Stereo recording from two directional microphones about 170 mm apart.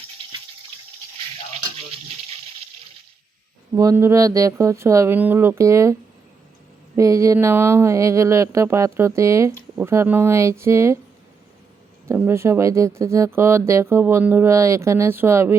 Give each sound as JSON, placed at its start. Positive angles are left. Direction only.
{"t": 3.8, "sound": "speech", "side_deg": -20}
{"t": 12.0, "sound": "speech", "side_deg": -15}